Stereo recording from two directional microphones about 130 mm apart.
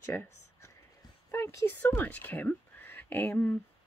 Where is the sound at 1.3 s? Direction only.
20° left (ahead or behind).